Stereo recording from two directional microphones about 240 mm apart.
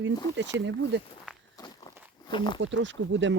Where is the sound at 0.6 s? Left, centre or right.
Right.